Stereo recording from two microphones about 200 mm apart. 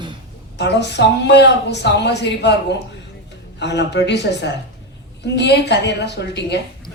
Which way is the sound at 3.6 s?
60° left (ahead or behind).